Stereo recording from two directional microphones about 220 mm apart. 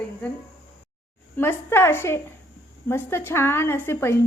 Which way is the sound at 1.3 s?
10° left (ahead or behind).